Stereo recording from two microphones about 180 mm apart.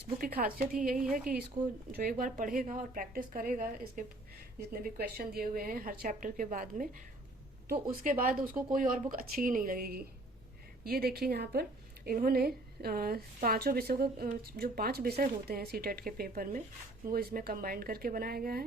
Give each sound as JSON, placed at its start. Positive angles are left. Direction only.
{"t": 0.2, "sound": "a woman's voice", "side_deg": -55}
{"t": 8.2, "sound": "a woman's voice", "side_deg": -50}